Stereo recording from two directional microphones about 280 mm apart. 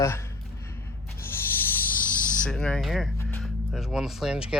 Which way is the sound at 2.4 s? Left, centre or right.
Centre.